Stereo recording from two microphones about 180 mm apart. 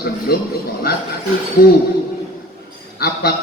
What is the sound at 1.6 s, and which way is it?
Speech, 55° left (ahead or behind).